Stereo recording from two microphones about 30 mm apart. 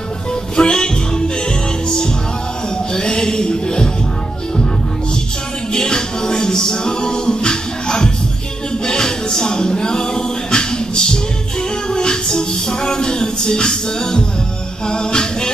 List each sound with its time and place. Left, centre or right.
0.6 s music: left
2.9 s a sound: left
5.7 s music: left
14.9 s a capella: left